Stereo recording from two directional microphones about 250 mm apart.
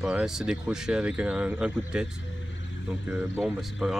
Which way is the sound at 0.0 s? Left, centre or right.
Centre.